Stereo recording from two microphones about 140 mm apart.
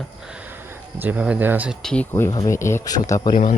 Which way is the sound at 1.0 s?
10° right (ahead or behind).